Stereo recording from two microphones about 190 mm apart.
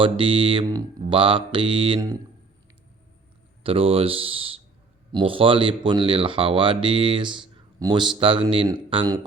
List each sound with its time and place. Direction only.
0.0 s speech: 25° right (ahead or behind)
3.6 s speech: 30° right (ahead or behind)